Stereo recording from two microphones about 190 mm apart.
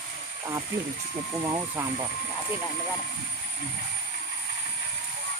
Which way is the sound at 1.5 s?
20° right (ahead or behind).